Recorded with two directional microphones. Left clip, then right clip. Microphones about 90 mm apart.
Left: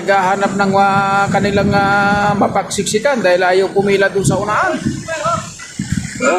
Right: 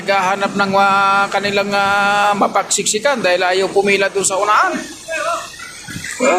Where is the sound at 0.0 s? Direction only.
35° left (ahead or behind).